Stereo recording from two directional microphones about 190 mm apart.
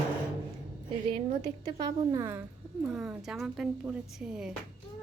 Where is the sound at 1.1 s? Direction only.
25° right (ahead or behind).